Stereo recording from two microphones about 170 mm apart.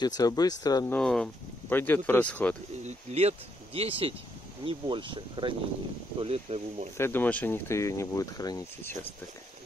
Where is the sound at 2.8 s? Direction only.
40° right (ahead or behind).